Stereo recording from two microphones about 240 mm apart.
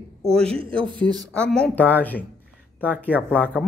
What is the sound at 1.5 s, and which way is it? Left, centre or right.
Speech, centre.